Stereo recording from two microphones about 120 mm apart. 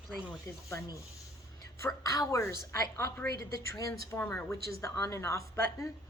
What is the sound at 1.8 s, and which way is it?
A woman's voice, 30° left (ahead or behind).